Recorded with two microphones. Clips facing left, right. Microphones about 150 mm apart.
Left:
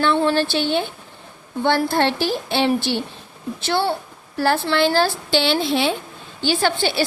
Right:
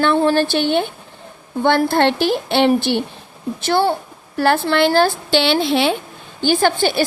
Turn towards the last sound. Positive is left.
turn(degrees=-50)  # may be behind; listen again after turning